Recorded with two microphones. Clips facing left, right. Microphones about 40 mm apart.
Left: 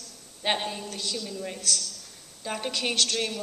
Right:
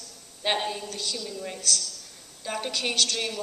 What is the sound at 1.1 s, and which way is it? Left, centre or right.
Speech, centre.